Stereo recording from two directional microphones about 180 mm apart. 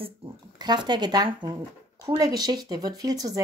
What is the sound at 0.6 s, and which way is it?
Speech, 25° right (ahead or behind).